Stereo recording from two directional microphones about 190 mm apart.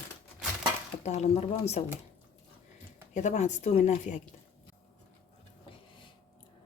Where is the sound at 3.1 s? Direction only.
40° left (ahead or behind).